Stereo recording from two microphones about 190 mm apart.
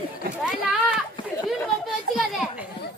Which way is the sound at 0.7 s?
5° right (ahead or behind).